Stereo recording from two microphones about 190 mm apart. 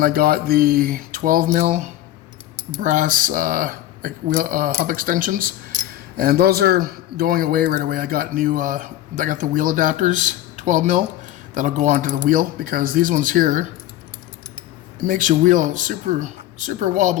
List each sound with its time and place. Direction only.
0.0 s speech: 50° right (ahead or behind)
15.0 s speech: 45° right (ahead or behind)